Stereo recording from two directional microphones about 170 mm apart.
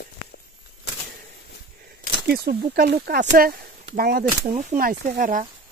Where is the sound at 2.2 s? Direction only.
65° right (ahead or behind).